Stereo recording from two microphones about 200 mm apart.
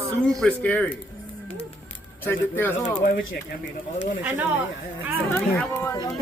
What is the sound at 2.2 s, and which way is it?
Speech, 10° left (ahead or behind).